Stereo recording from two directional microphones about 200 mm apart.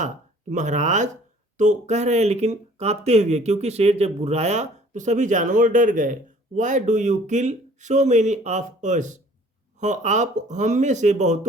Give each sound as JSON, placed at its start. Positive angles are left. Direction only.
{"t": 0.5, "sound": "speech", "side_deg": -40}